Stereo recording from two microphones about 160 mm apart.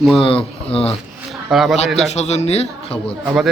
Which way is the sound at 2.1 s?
45° left (ahead or behind).